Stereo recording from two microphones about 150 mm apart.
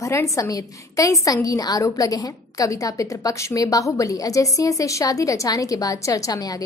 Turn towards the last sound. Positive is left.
turn(degrees=25)  # may be behind; listen again after turning